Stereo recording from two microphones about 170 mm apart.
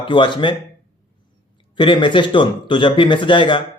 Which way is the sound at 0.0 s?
30° left (ahead or behind).